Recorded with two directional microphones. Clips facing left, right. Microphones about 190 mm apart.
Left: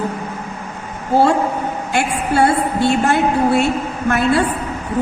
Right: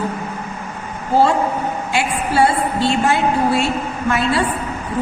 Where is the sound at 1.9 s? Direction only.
50° left (ahead or behind).